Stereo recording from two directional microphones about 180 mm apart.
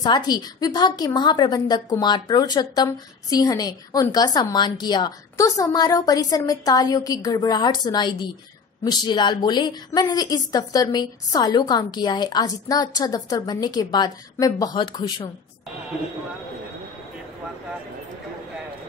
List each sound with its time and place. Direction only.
0.0 s a woman's voice: 25° left (ahead or behind)